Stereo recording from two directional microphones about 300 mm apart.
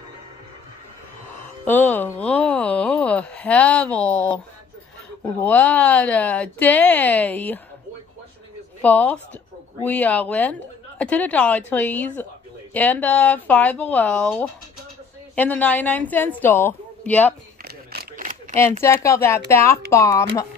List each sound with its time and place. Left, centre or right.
1.6 s speech: centre
5.4 s speech: centre
8.8 s speech: centre
17.6 s single-lens reflex camera: right
18.6 s speech: centre